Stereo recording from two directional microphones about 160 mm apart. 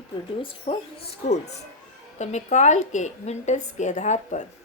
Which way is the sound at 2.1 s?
45° left (ahead or behind).